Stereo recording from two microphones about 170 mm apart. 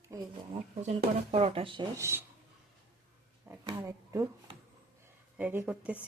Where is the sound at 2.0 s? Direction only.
15° right (ahead or behind).